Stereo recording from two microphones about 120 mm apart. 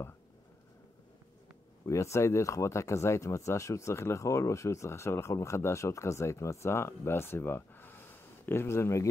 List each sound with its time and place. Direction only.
1.9 s speech: 25° left (ahead or behind)